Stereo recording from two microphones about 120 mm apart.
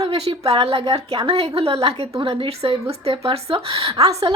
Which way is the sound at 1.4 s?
55° right (ahead or behind).